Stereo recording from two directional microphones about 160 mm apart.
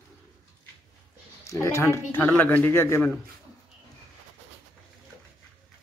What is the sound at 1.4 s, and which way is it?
Speech, 20° left (ahead or behind).